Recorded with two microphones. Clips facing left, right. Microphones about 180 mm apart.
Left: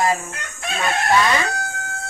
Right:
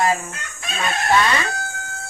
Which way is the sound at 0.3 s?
60° left (ahead or behind).